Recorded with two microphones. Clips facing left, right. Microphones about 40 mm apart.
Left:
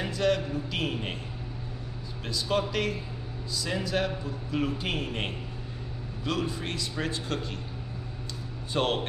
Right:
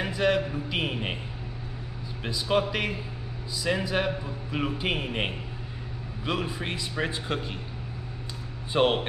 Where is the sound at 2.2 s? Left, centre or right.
Centre.